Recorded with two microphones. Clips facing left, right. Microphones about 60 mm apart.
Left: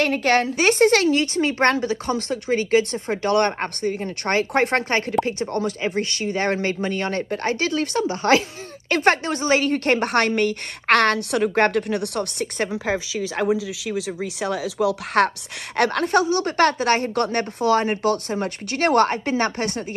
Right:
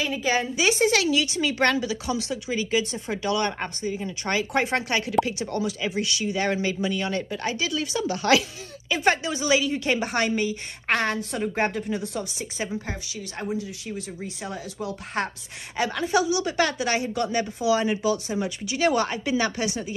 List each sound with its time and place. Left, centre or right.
0.0 s speech: left
8.0 s speech: left
8.8 s a woman's voice: left